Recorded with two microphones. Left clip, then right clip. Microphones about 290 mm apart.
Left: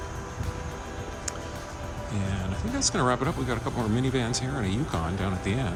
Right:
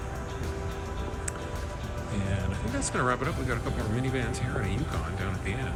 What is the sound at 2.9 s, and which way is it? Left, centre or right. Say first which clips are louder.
Speech: left 1 dB; centre.